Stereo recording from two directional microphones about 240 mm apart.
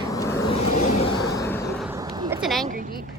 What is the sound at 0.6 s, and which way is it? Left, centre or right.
Vehicle, left.